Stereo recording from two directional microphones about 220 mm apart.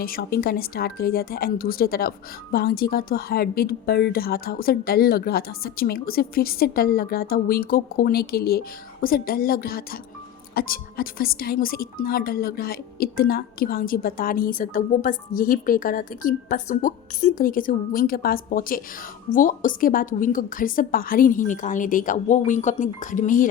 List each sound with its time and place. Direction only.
0.0 s speech: 45° left (ahead or behind)